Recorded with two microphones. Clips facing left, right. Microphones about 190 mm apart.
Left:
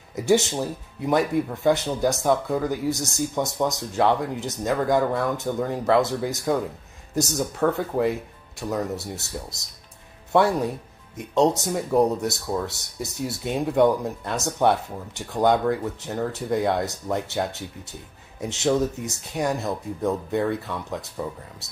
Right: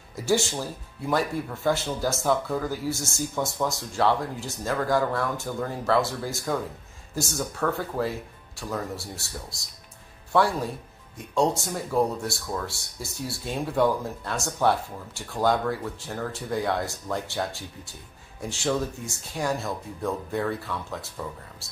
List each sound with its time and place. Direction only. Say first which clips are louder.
0.1 s speech: left 4 dB; 20° left (ahead or behind)
11.1 s speech: left 4 dB; 20° left (ahead or behind)